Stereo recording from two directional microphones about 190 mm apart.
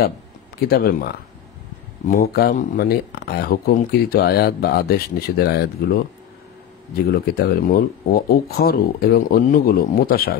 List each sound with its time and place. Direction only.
0.7 s speech: 55° left (ahead or behind)
7.1 s speech: 55° left (ahead or behind)